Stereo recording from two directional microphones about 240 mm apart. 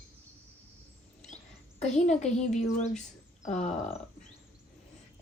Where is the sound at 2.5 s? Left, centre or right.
Left.